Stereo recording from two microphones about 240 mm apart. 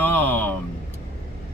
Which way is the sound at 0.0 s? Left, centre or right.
Centre.